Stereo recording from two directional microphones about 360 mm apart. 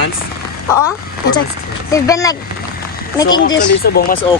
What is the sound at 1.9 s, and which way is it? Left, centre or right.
Speech, centre.